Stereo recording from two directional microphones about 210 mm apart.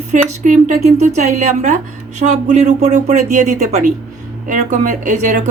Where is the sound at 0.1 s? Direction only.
35° right (ahead or behind).